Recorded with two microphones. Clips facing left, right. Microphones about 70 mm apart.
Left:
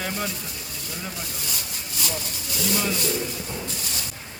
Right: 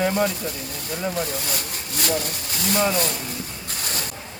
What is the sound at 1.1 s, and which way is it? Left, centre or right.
Speech, right.